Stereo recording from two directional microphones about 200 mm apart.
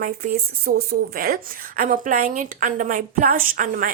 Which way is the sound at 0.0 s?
45° right (ahead or behind).